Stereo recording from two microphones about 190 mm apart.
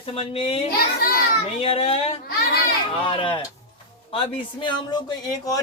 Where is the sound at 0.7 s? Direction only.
55° left (ahead or behind).